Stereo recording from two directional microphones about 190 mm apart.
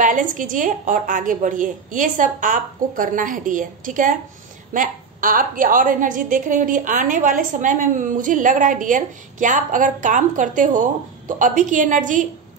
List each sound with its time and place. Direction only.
0.0 s a woman's voice: 45° right (ahead or behind)